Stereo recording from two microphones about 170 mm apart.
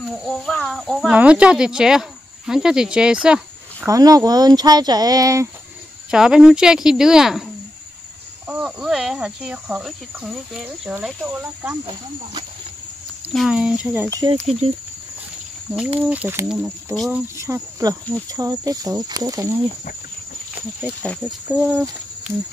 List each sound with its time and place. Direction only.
0.2 s speech: 5° left (ahead or behind)
3.8 s speech: 20° right (ahead or behind)
6.0 s speech: 5° right (ahead or behind)
8.5 s speech: 5° right (ahead or behind)
13.3 s speech: centre (ahead or behind)
14.0 s speech: 20° right (ahead or behind)
16.1 s speech: 10° right (ahead or behind)
17.4 s speech: 15° right (ahead or behind)
21.5 s speech: 10° right (ahead or behind)